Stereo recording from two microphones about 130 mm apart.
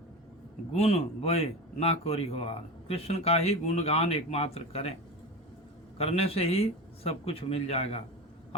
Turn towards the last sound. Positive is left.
turn(degrees=50)  # may be behind; listen again after turning